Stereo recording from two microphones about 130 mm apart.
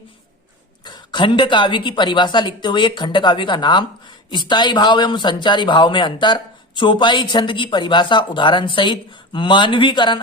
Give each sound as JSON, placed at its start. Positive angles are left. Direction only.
{"t": 0.9, "sound": "a man's voice", "side_deg": 35}